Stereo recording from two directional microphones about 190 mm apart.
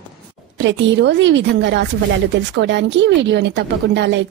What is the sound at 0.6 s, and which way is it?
A woman's voice, 70° right (ahead or behind).